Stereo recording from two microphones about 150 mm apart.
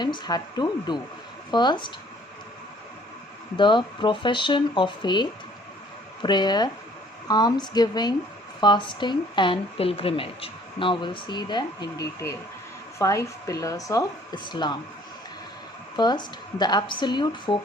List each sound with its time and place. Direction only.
0.0 s speech: 30° left (ahead or behind)
3.6 s speech: 30° left (ahead or behind)
16.0 s speech: 30° left (ahead or behind)